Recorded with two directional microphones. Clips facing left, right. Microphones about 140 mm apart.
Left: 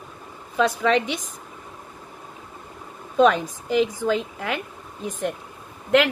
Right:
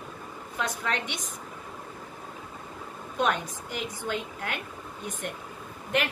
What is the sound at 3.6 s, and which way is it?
Speech, 90° left.